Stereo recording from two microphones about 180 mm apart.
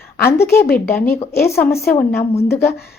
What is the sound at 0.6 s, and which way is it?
Speech, 60° left (ahead or behind).